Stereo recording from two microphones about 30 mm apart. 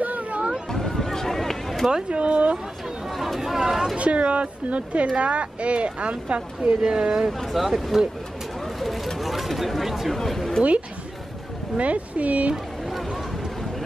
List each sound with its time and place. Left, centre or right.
0.0 s a sound: right
0.7 s a sound: centre
1.9 s speech: right
3.1 s chatter: centre
3.3 s speech: centre
4.0 s a woman's voice: right
6.8 s speech: right
7.3 s speech: centre
8.6 s vehicle: centre
9.2 s a sound: centre
10.1 s speech: centre
11.7 s a woman's voice: right